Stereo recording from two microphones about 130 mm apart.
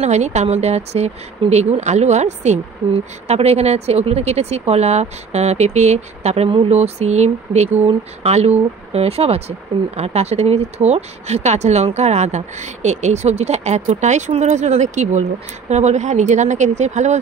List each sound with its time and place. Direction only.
0.0 s speech: 60° right (ahead or behind)